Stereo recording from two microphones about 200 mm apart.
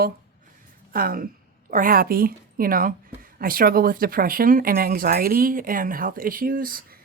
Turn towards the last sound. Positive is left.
turn(degrees=-45)  # may be behind; listen again after turning